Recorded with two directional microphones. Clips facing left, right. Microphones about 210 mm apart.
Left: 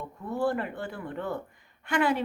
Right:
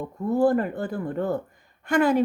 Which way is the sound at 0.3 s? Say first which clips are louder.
Right 7 dB; 40° right (ahead or behind).